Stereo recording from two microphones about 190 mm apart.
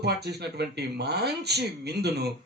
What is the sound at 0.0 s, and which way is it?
A man's voice, 60° right (ahead or behind).